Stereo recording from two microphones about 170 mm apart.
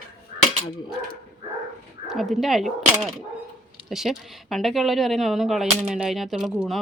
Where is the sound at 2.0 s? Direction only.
Centre (ahead or behind).